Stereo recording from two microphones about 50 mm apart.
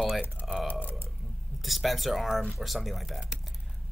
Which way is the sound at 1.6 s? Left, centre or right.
Centre.